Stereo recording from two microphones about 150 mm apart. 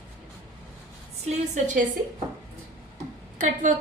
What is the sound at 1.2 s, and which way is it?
Speech, 50° right (ahead or behind).